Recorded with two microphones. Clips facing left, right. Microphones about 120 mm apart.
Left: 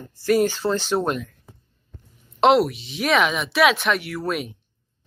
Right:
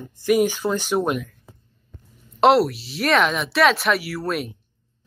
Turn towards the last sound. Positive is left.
turn(degrees=0)  # may be behind; listen again after turning